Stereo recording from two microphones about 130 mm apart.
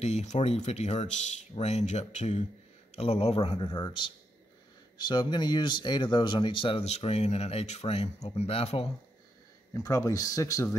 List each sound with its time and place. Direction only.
0.0 s speech: 60° left (ahead or behind)
3.0 s speech: 50° left (ahead or behind)
6.8 s speech: 55° left (ahead or behind)
9.8 s speech: 25° left (ahead or behind)